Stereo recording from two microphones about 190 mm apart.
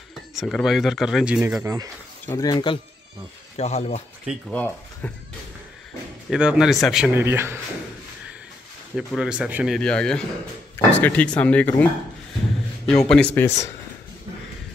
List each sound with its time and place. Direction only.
0.3 s speech: centre (ahead or behind)
2.2 s speech: 15° left (ahead or behind); by 4.0 s 35° left (ahead or behind)
4.3 s speech: 5° left (ahead or behind)
6.3 s speech: 5° right (ahead or behind)
8.9 s speech: 5° right (ahead or behind)